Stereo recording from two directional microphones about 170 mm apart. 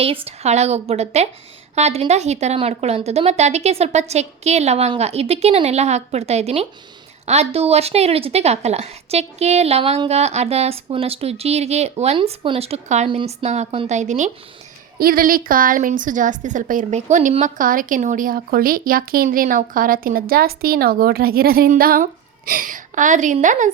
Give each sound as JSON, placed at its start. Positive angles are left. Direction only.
{"t": 0.0, "sound": "a woman's voice", "side_deg": -35}
{"t": 14.9, "sound": "a woman's voice", "side_deg": -60}